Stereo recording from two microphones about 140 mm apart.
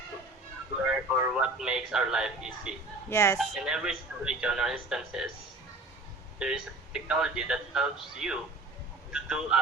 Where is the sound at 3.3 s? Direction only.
5° right (ahead or behind).